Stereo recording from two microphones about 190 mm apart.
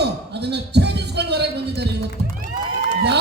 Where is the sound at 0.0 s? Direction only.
60° right (ahead or behind).